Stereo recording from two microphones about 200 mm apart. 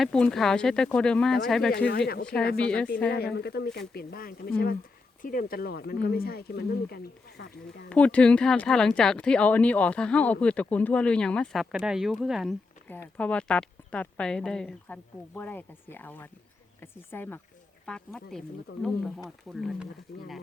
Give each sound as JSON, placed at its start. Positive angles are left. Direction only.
{"t": 0.0, "sound": "speech", "side_deg": 0}
{"t": 1.9, "sound": "speech", "side_deg": 55}
{"t": 2.6, "sound": "speech", "side_deg": 5}
{"t": 3.1, "sound": "speech", "side_deg": 55}
{"t": 7.9, "sound": "speech", "side_deg": 5}